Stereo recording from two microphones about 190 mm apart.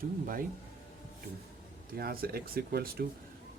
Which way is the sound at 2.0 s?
55° right (ahead or behind).